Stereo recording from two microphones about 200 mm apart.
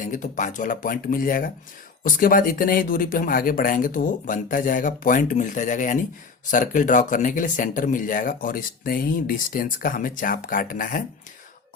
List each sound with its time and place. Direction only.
0.0 s speech: 40° left (ahead or behind)